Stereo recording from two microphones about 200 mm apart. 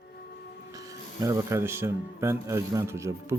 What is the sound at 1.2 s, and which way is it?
Speech, 15° right (ahead or behind).